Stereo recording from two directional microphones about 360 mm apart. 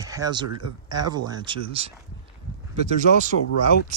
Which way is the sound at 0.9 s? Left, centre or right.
Centre.